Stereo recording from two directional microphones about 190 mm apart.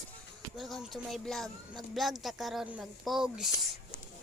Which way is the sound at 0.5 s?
Centre (ahead or behind).